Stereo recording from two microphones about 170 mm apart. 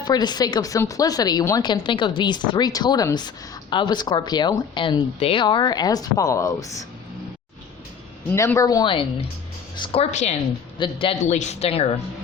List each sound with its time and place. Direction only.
0.0 s speech: 25° left (ahead or behind)
8.3 s speech: 15° left (ahead or behind); by 10.3 s 40° left (ahead or behind)
10.8 s speech: 30° left (ahead or behind)
11.2 s speech: 45° left (ahead or behind)